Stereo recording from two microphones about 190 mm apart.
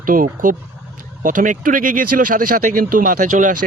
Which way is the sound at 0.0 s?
45° right (ahead or behind).